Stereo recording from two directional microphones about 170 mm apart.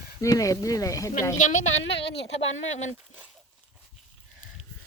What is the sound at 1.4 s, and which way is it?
A woman's voice, 45° left (ahead or behind).